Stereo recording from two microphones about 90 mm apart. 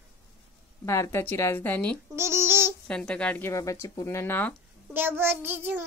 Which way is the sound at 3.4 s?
35° left (ahead or behind).